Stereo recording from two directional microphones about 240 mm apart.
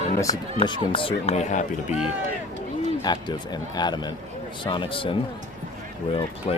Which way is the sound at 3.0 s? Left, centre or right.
Centre.